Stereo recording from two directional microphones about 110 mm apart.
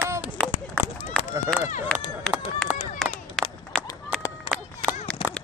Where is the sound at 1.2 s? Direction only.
10° left (ahead or behind).